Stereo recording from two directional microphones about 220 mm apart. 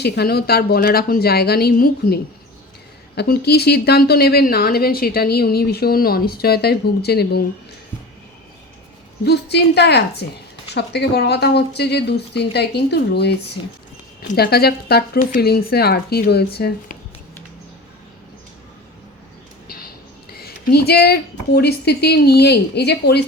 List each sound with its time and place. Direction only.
0.0 s speech: 45° left (ahead or behind)
3.2 s speech: 45° left (ahead or behind)
9.2 s speech: 50° left (ahead or behind)
19.6 s a sound: 45° left (ahead or behind)
20.3 s speech: 45° left (ahead or behind)